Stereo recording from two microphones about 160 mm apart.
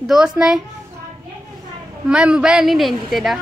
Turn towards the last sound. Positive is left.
turn(degrees=0)  # may be behind; listen again after turning